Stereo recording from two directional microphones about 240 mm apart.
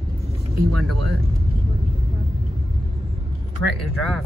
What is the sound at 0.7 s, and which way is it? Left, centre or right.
Speech, right.